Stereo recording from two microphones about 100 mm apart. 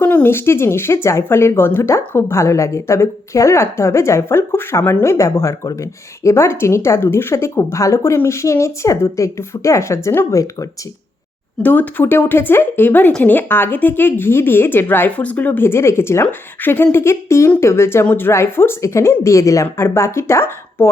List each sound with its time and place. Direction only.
0.0 s speech: 20° left (ahead or behind); by 10.7 s 35° left (ahead or behind)
11.6 s speech: 15° left (ahead or behind)